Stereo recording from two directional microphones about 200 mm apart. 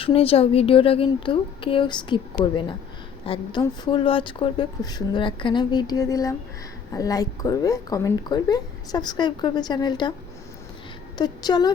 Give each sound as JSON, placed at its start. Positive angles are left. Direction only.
{"t": 0.0, "sound": "a woman's voice", "side_deg": 30}
{"t": 11.2, "sound": "a woman's voice", "side_deg": 20}